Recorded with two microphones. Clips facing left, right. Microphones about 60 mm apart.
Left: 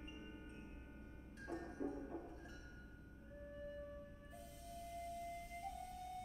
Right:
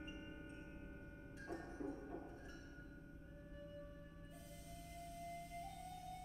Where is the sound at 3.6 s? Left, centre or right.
Centre.